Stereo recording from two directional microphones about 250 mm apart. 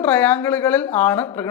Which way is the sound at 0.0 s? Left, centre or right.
Centre.